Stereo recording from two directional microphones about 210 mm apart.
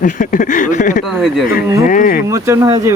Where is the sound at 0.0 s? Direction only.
40° left (ahead or behind).